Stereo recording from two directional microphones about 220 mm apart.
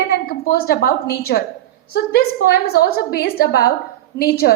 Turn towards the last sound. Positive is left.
turn(degrees=45)  # may be behind; listen again after turning